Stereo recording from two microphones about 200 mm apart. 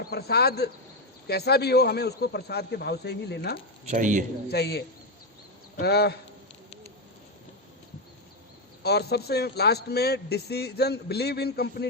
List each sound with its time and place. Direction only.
0.0 s speech: 50° left (ahead or behind)
3.8 s speech: 40° right (ahead or behind)
4.5 s a man's voice: 55° left (ahead or behind)
8.8 s speech: 55° left (ahead or behind)